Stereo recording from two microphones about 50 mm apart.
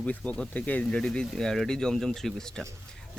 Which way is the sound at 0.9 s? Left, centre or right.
Centre.